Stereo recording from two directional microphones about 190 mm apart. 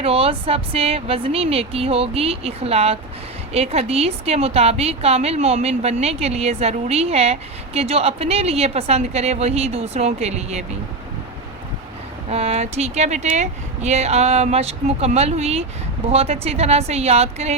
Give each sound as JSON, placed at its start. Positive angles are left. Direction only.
{"t": 0.0, "sound": "a woman's voice", "side_deg": -30}
{"t": 12.3, "sound": "a woman's voice", "side_deg": -35}